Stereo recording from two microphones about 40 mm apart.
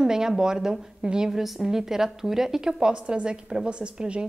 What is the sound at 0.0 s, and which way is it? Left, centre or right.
A woman's voice, centre.